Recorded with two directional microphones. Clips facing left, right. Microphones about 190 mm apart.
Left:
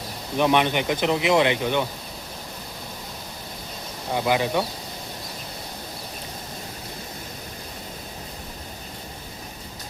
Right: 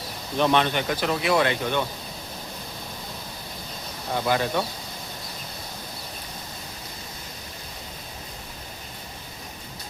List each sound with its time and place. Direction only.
0.3 s speech: 15° left (ahead or behind)
4.1 s speech: 10° left (ahead or behind)